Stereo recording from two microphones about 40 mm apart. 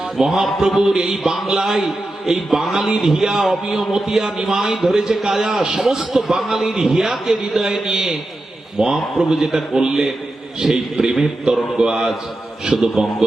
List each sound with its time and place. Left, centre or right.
0.2 s a man's voice: centre
8.8 s a man's voice: centre
11.0 s a man's voice: centre